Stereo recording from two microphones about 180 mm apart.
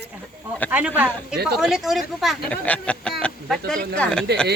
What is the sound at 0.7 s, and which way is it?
A woman's voice, 10° right (ahead or behind).